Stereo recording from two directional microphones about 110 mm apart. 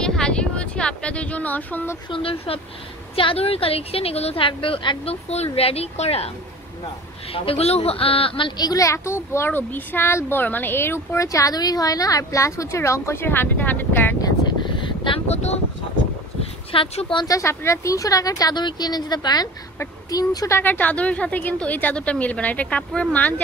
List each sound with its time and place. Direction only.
0.0 s a sound: 5° left (ahead or behind)
2.0 s a woman's voice: 55° left (ahead or behind)
7.3 s a woman's voice: 60° left (ahead or behind); by 14.1 s 15° left (ahead or behind)
14.8 s vehicle: 50° left (ahead or behind)
15.2 s speech: 75° left (ahead or behind)
16.7 s a woman's voice: 55° left (ahead or behind)
17.3 s speech: 25° left (ahead or behind)
20.5 s a woman's voice: 15° left (ahead or behind)